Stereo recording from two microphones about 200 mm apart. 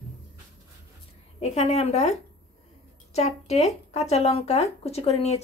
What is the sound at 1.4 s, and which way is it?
Speech, 35° left (ahead or behind).